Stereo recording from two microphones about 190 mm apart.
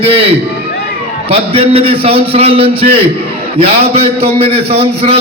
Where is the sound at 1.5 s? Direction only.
30° right (ahead or behind).